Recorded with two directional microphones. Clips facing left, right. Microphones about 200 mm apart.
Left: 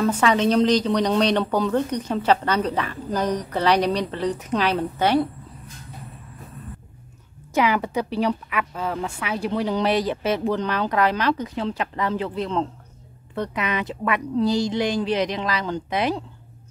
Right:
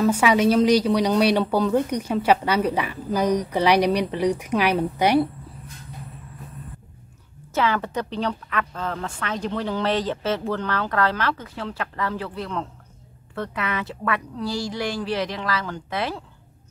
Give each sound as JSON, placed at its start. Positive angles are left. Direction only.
{"t": 0.0, "sound": "speech", "side_deg": -10}
{"t": 7.5, "sound": "a woman's voice", "side_deg": 15}